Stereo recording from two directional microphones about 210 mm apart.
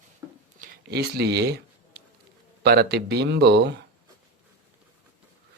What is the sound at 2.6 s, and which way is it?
Speech, 50° right (ahead or behind).